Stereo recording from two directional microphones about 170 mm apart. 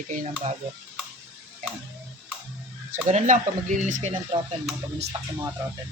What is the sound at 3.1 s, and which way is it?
Speech, 45° right (ahead or behind).